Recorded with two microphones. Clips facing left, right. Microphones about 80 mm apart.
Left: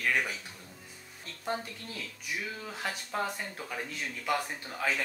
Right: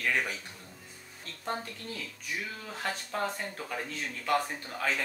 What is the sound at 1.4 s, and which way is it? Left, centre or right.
Speech, centre.